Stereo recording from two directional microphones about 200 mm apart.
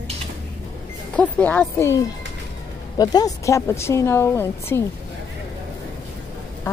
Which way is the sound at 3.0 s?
20° left (ahead or behind).